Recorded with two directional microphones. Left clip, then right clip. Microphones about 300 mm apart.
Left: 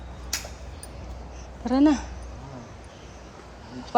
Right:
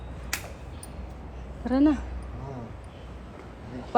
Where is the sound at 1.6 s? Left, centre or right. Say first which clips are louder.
Left 2 dB; centre.